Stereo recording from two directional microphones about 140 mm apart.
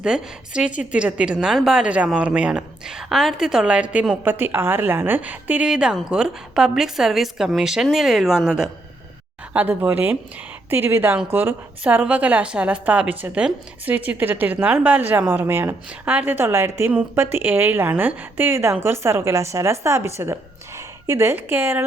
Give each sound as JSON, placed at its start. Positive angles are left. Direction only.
{"t": 0.0, "sound": "a woman's voice", "side_deg": -5}